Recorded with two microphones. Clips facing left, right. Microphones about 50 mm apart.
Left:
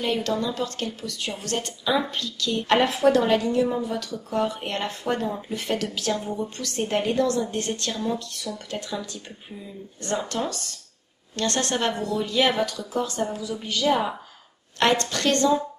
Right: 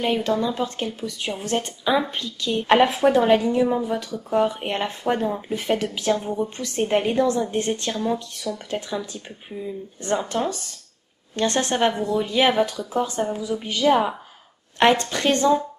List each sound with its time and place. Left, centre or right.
0.0 s a woman's voice: centre